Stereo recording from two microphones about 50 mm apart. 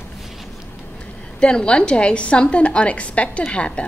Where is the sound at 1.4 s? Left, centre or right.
Left.